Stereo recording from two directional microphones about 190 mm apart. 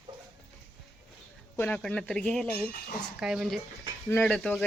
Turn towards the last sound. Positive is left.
turn(degrees=0)  # may be behind; listen again after turning